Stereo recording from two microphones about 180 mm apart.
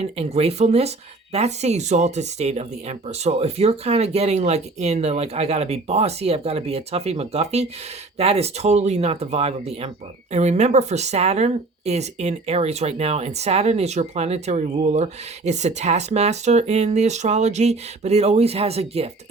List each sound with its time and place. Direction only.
0.0 s speech: 35° right (ahead or behind)